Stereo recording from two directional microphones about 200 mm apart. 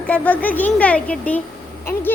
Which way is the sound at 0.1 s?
10° left (ahead or behind).